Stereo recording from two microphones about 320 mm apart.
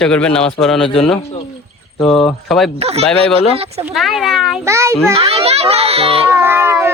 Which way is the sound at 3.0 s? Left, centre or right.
Centre.